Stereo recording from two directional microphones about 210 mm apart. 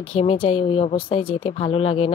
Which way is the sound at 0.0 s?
25° left (ahead or behind).